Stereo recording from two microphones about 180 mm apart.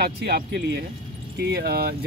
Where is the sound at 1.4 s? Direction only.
60° right (ahead or behind).